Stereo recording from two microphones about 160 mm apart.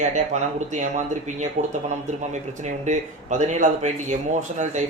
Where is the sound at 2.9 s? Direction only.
50° right (ahead or behind).